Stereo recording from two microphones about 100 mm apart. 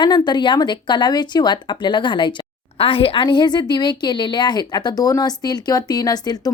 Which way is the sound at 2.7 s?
65° left (ahead or behind).